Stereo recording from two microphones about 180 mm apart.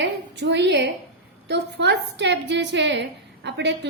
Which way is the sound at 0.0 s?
80° right.